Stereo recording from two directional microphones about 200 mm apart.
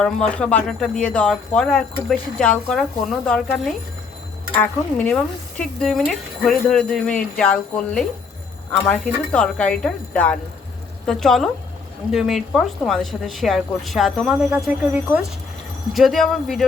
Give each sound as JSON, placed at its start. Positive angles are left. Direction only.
{"t": 0.0, "sound": "a woman's voice", "side_deg": 5}
{"t": 15.9, "sound": "speech", "side_deg": 0}